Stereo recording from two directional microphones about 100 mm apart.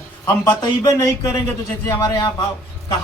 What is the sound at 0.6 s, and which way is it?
A man's voice, 40° left (ahead or behind).